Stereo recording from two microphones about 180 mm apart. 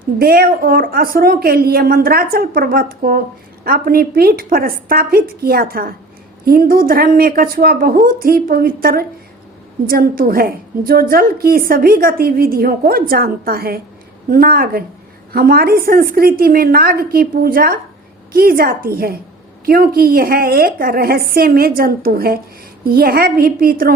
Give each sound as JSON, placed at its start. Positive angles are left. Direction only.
{"t": 0.2, "sound": "a woman's voice", "side_deg": -55}